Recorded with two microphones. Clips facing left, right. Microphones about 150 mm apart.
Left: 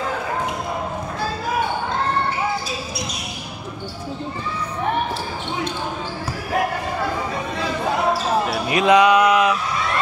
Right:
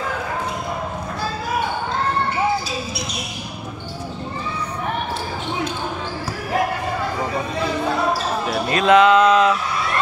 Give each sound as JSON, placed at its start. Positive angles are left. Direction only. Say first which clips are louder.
{"t": 8.5, "sound": "basketball bounce", "louder": "right 2 dB", "side_deg": 15}